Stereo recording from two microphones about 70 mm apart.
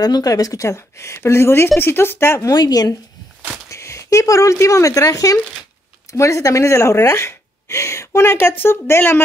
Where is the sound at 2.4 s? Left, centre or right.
Left.